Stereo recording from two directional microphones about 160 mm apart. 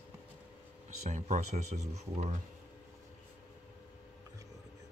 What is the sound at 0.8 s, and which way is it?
Speech, 45° right (ahead or behind).